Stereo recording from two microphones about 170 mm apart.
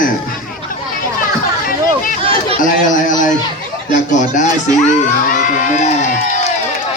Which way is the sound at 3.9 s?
45° left (ahead or behind).